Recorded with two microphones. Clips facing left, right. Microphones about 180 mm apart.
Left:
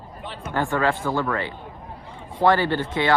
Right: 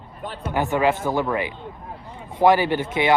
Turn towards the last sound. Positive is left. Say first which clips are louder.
# right 2 dB
turn(degrees=-15)  # may be behind; listen again after turning